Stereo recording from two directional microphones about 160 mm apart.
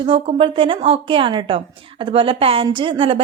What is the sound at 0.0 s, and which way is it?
A woman's voice, 35° right (ahead or behind).